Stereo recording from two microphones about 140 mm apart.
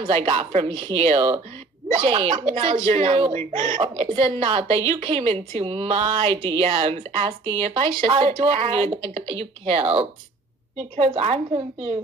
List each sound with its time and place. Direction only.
0.1 s speech: 50° right (ahead or behind)
3.7 s speech: 40° right (ahead or behind)
11.1 s speech: 50° right (ahead or behind)